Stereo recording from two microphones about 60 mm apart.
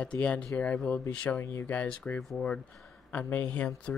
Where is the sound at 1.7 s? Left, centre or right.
Left.